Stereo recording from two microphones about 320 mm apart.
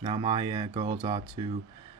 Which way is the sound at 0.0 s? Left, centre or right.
Centre.